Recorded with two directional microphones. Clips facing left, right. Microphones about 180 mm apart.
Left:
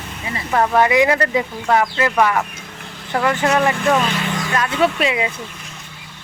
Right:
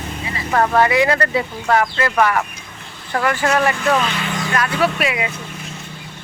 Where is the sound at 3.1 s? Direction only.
15° left (ahead or behind).